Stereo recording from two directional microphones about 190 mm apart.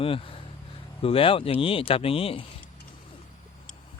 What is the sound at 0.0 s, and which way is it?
Speech, 30° left (ahead or behind).